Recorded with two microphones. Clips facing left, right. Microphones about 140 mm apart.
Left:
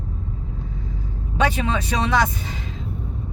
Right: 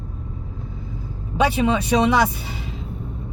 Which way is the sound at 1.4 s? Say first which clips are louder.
Right 3 dB; 10° right (ahead or behind).